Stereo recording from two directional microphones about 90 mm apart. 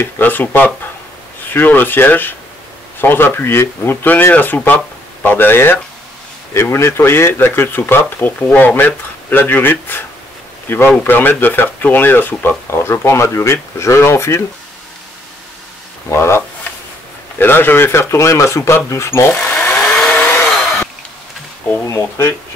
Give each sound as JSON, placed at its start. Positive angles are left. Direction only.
{"t": 0.0, "sound": "speech", "side_deg": 20}
{"t": 16.1, "sound": "speech", "side_deg": 30}
{"t": 19.7, "sound": "chainsaw", "side_deg": 15}
{"t": 21.8, "sound": "speech", "side_deg": 35}